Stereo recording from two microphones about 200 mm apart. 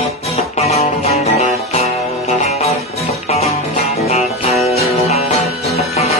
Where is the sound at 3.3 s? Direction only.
30° left (ahead or behind).